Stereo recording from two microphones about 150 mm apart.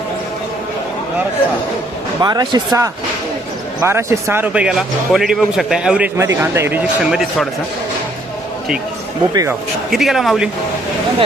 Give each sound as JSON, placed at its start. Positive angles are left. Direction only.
{"t": 2.2, "sound": "speech", "side_deg": -30}
{"t": 6.1, "sound": "a man's voice", "side_deg": -20}
{"t": 7.0, "sound": "speech", "side_deg": -5}
{"t": 9.3, "sound": "speech", "side_deg": -20}
{"t": 9.9, "sound": "speech", "side_deg": 0}